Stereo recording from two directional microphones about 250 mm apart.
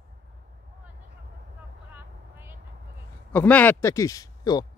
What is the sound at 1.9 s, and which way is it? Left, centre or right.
Vehicle, centre.